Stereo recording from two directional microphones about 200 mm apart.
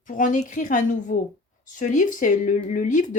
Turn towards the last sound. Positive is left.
turn(degrees=40)  # may be behind; listen again after turning